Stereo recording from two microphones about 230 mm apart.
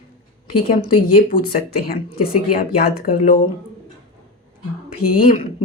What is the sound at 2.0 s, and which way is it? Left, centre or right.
Speech, left.